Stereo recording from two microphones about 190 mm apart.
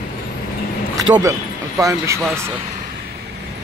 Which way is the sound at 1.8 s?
15° right (ahead or behind).